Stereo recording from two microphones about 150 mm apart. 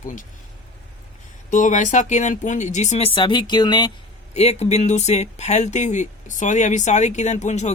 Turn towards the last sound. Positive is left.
turn(degrees=50)  # may be behind; listen again after turning